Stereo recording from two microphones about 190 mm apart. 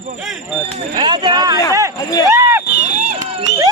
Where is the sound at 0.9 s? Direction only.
25° right (ahead or behind).